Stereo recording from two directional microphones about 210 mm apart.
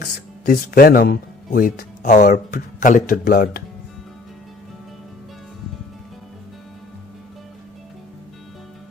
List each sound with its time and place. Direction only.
0.0 s speech: 45° left (ahead or behind)